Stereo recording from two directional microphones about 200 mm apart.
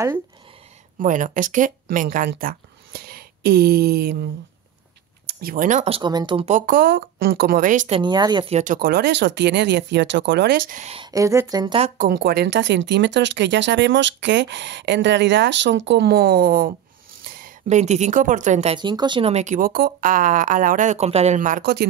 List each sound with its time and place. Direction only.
0.9 s speech: 40° right (ahead or behind); by 6.5 s 25° right (ahead or behind)
6.5 s speech: 45° right (ahead or behind)
8.0 s speech: 20° right (ahead or behind)
8.5 s speech: 45° right (ahead or behind)
11.0 s speech: 15° right (ahead or behind)
12.0 s speech: 50° right (ahead or behind)
18.8 s speech: 20° right (ahead or behind); by 21.8 s 45° right (ahead or behind)